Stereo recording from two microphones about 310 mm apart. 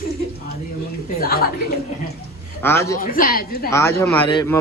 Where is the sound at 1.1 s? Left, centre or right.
Left.